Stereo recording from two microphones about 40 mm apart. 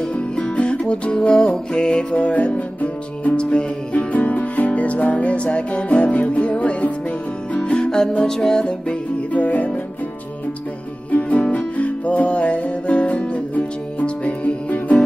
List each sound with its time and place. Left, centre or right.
0.1 s music: left
7.7 s music: centre
9.3 s music: left
11.1 s music: left